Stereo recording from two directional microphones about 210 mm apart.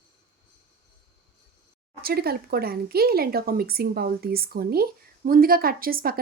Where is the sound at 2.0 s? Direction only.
45° right (ahead or behind).